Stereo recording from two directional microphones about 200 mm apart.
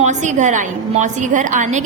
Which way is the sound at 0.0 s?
35° right (ahead or behind).